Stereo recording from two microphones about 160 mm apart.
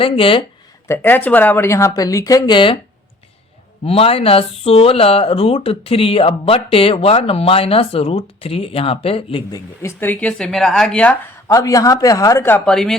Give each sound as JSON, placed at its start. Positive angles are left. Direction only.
{"t": 0.0, "sound": "speech", "side_deg": 35}
{"t": 0.9, "sound": "speech", "side_deg": 10}
{"t": 3.8, "sound": "speech", "side_deg": 35}
{"t": 9.5, "sound": "speech", "side_deg": 15}
{"t": 11.4, "sound": "speech", "side_deg": 20}